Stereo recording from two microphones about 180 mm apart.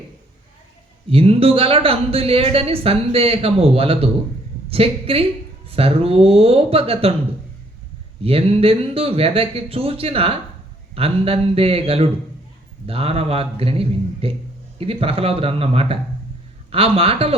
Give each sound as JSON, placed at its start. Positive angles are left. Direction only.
{"t": 1.1, "sound": "speech", "side_deg": -30}
{"t": 8.2, "sound": "speech", "side_deg": -30}